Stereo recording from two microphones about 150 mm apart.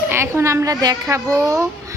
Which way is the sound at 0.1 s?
15° right (ahead or behind).